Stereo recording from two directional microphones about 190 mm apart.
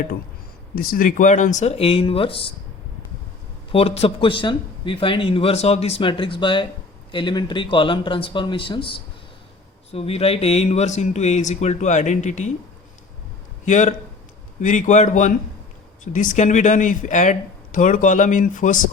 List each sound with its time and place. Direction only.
0.8 s speech: 45° left (ahead or behind); by 2.5 s 30° left (ahead or behind)
3.7 s speech: 30° left (ahead or behind)
13.7 s speech: 40° left (ahead or behind)